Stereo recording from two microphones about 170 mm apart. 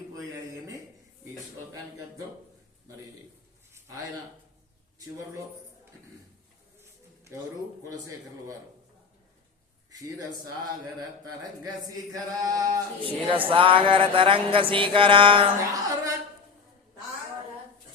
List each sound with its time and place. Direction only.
7.9 s a man's voice: 20° right (ahead or behind)
9.9 s a man's voice: 20° right (ahead or behind)
11.6 s speech: 20° right (ahead or behind)